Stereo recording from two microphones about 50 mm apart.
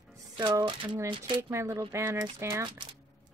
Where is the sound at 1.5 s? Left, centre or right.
Right.